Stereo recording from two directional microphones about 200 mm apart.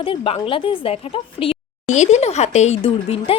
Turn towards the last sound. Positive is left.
turn(degrees=30)  # may be behind; listen again after turning